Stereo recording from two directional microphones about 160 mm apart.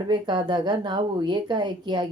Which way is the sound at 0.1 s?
30° right (ahead or behind).